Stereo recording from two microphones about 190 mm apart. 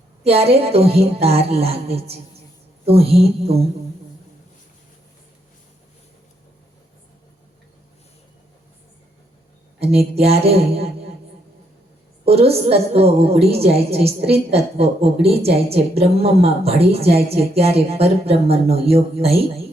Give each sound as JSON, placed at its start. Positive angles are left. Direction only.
{"t": 0.3, "sound": "a woman's voice", "side_deg": -30}
{"t": 9.8, "sound": "a woman's voice", "side_deg": -30}
{"t": 12.2, "sound": "a woman's voice", "side_deg": -30}